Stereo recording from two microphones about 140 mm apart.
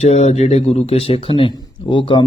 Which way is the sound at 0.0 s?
50° left (ahead or behind).